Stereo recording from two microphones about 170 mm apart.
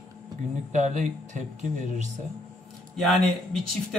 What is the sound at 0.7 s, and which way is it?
Speech, 45° right (ahead or behind).